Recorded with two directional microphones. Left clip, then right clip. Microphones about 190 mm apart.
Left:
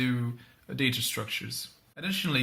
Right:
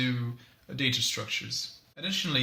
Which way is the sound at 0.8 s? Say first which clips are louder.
Right 1 dB; 40° left (ahead or behind).